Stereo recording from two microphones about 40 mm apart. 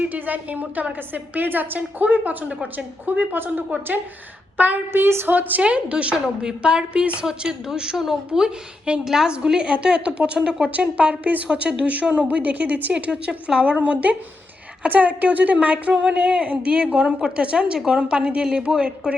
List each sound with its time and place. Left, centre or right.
0.0 s a woman's voice: right
1.4 s a woman's voice: right
4.9 s a woman's voice: right
5.3 s a woman's voice: right
5.6 s a woman's voice: right; by 8.2 s centre
8.3 s a woman's voice: right
9.6 s a woman's voice: right
12.9 s a woman's voice: right
13.7 s speech: right
15.6 s a woman's voice: right